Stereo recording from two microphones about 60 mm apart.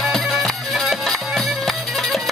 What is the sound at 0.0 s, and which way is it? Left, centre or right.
Music, centre.